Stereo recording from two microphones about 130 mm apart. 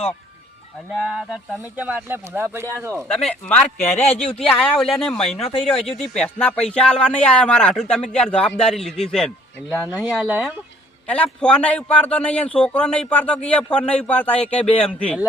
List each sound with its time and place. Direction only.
0.9 s speech: centre (ahead or behind)
1.7 s speech: 10° right (ahead or behind)
3.2 s speech: 10° left (ahead or behind)
4.0 s speech: 50° left (ahead or behind)
4.4 s speech: 5° left (ahead or behind)
9.8 s speech: 10° right (ahead or behind)
11.1 s speech: 10° left (ahead or behind)